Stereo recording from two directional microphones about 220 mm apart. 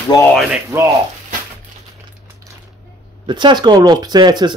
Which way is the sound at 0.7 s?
15° right (ahead or behind).